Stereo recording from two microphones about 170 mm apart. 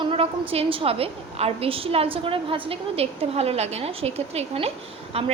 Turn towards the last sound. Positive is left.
turn(degrees=-35)  # may be behind; listen again after turning